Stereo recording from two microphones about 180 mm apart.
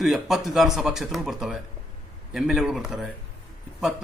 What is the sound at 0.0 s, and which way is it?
A man's voice, centre (ahead or behind).